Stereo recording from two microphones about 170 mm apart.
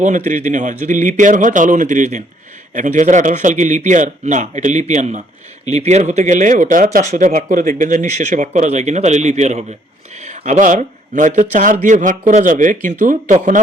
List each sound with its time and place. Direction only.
0.3 s a man's voice: 45° right (ahead or behind)